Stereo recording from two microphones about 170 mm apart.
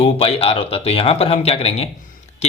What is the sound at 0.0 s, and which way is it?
Speech, 35° left (ahead or behind).